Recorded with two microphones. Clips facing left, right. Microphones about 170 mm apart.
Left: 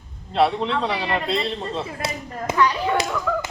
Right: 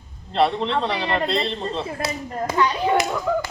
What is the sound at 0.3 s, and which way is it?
Speech, 5° left (ahead or behind).